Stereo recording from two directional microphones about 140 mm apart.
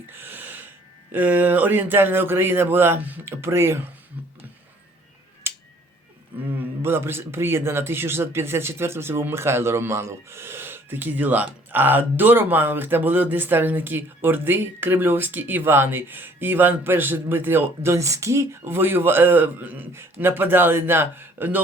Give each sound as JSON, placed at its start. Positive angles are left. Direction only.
{"t": 0.1, "sound": "a sound", "side_deg": -15}
{"t": 1.1, "sound": "a man's voice", "side_deg": -10}
{"t": 5.5, "sound": "finger snapping", "side_deg": -15}
{"t": 6.6, "sound": "a man's voice", "side_deg": -15}